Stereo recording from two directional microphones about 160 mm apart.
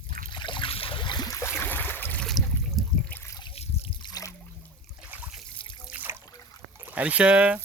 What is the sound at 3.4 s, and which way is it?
Trickle, 35° left (ahead or behind).